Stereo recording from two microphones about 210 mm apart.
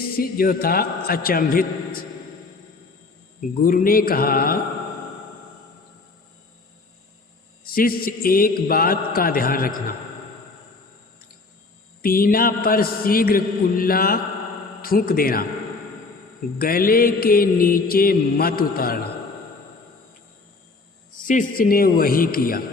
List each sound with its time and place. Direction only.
0.2 s mantra: 45° left (ahead or behind)
3.6 s mantra: 40° left (ahead or behind)
7.6 s mantra: 45° left (ahead or behind)
12.0 s mantra: 45° left (ahead or behind)
16.6 s mantra: 45° left (ahead or behind)
21.2 s mantra: 40° left (ahead or behind)